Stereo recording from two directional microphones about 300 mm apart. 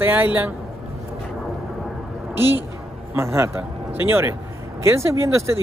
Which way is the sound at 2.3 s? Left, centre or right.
Centre.